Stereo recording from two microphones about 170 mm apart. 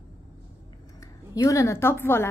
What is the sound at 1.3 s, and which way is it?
Speech, 20° left (ahead or behind).